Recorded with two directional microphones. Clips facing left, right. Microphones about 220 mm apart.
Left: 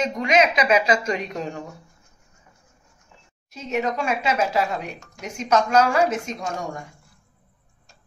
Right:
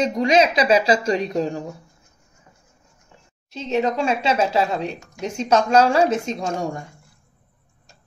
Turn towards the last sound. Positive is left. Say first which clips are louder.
# right 4 dB
turn(degrees=-30)  # may be behind; listen again after turning